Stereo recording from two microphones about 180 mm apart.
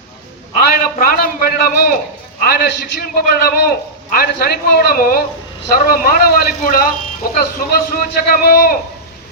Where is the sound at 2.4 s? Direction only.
60° left (ahead or behind).